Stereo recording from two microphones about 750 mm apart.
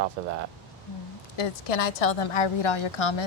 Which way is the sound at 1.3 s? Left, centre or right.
Left.